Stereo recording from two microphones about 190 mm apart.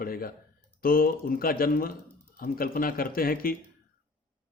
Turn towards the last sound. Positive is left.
turn(degrees=50)  # may be behind; listen again after turning